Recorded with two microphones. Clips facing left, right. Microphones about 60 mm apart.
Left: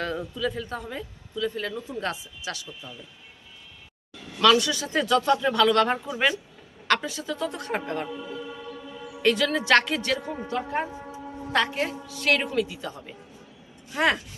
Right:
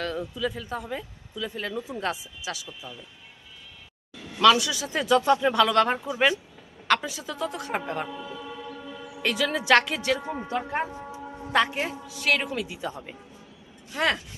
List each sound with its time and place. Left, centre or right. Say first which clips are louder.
0.0 s speech: left 1 dB; centre
4.4 s a man's voice: right 1 dB; centre
9.2 s speech: left 3 dB; centre
10.2 s speech: even; right
11.1 s a woman's voice: right 1 dB; centre
13.9 s speech: left 2 dB; centre